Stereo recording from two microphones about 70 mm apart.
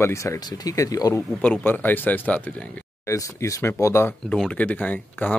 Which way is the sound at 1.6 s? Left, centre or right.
Left.